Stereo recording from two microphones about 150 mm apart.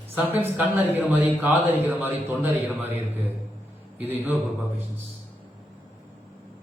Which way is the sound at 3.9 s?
15° right (ahead or behind).